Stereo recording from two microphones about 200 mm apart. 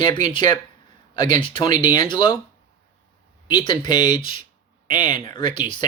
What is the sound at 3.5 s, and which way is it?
Speech, 20° left (ahead or behind).